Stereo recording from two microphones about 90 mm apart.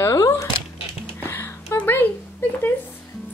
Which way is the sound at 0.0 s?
35° left (ahead or behind).